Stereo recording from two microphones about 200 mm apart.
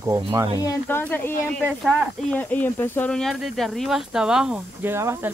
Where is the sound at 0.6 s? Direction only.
15° left (ahead or behind); by 5.3 s 10° right (ahead or behind).